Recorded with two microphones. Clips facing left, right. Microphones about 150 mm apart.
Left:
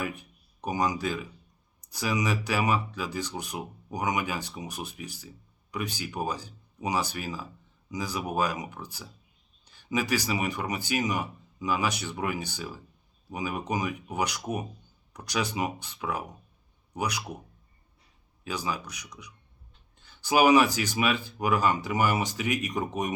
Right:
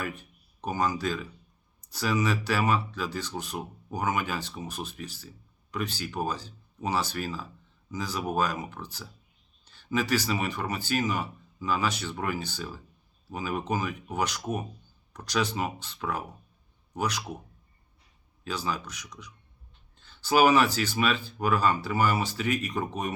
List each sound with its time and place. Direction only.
0.0 s speech: 15° left (ahead or behind)
18.4 s speech: 10° left (ahead or behind)